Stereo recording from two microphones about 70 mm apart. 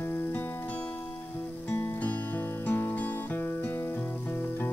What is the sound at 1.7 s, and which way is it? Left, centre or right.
Music, left.